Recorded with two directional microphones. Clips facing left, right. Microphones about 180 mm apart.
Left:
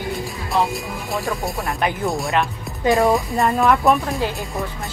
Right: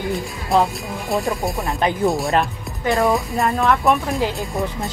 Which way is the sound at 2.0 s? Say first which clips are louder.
Right 4 dB; centre (ahead or behind).